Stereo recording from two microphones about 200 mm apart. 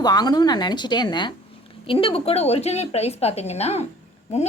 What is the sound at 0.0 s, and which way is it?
A woman's voice, 20° left (ahead or behind).